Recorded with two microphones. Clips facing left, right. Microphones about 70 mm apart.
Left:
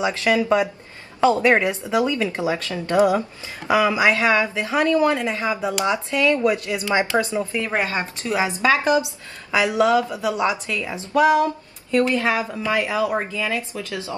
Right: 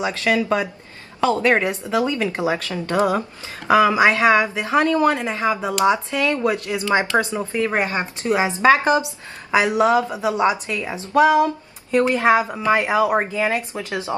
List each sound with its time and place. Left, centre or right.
0.0 s speech: left
2.0 s speech: right